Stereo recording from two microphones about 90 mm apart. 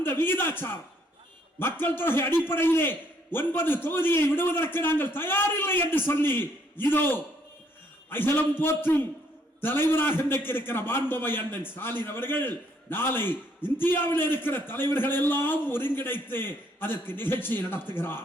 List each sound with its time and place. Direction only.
0.0 s a man's voice: 25° left (ahead or behind)